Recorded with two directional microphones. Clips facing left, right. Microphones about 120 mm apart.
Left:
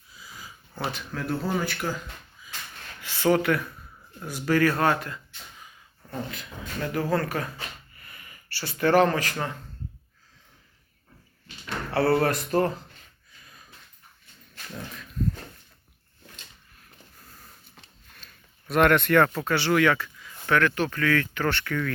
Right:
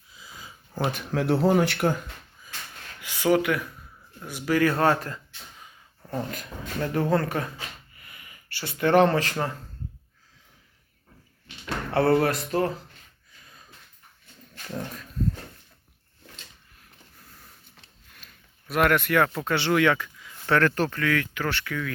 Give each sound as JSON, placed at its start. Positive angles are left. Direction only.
{"t": 0.1, "sound": "a sound", "side_deg": -20}
{"t": 1.1, "sound": "speech", "side_deg": -75}
{"t": 3.0, "sound": "speech", "side_deg": -15}
{"t": 4.6, "sound": "speech", "side_deg": -25}
{"t": 6.7, "sound": "speech", "side_deg": -25}
{"t": 11.4, "sound": "a sound", "side_deg": -20}
{"t": 12.3, "sound": "speech", "side_deg": -5}
{"t": 18.7, "sound": "speech", "side_deg": -5}
{"t": 19.4, "sound": "speech", "side_deg": -20}
{"t": 20.5, "sound": "speech", "side_deg": -35}
{"t": 20.9, "sound": "speech", "side_deg": -15}
{"t": 21.3, "sound": "speech", "side_deg": -5}